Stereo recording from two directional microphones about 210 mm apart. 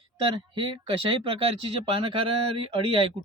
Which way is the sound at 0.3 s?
25° right (ahead or behind).